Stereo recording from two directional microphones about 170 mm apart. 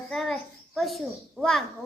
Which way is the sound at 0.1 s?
Centre (ahead or behind).